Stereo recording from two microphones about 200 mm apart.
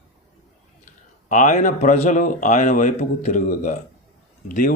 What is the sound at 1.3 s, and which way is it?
Speech, 40° left (ahead or behind).